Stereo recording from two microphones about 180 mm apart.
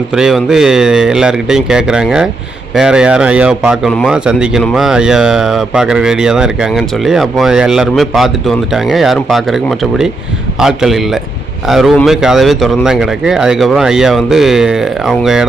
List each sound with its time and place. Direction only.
0.1 s speech: centre (ahead or behind)